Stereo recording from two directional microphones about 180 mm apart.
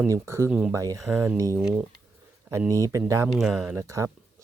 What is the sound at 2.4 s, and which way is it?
Speech, 15° right (ahead or behind).